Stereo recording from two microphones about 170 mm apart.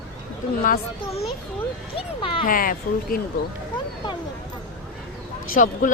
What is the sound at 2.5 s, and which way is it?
Speech, 55° left (ahead or behind).